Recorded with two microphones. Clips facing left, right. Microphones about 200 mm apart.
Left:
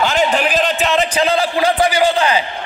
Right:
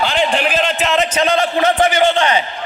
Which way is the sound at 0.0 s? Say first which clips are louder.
Left 1 dB; 40° left (ahead or behind).